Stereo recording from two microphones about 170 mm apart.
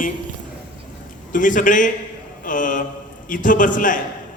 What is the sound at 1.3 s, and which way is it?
A man's voice, 50° left (ahead or behind).